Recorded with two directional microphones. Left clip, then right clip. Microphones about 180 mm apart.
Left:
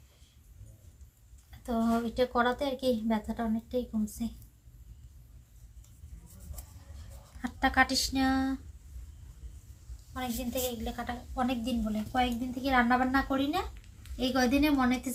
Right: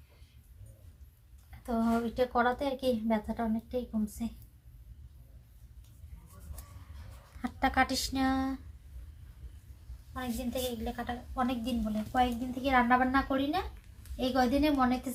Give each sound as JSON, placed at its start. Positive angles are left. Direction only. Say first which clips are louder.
{"t": 1.5, "sound": "a woman's voice", "louder": "left 1 dB", "side_deg": 0}
{"t": 7.4, "sound": "speech", "louder": "left 2 dB", "side_deg": -20}
{"t": 10.2, "sound": "a woman's voice", "louder": "left 1 dB", "side_deg": 0}